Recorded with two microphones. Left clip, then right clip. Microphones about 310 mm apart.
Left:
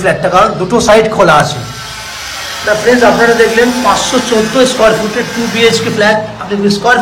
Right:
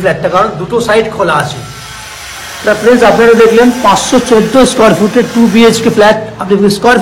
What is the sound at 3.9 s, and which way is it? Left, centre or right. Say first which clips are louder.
Speech: right 2 dB; centre.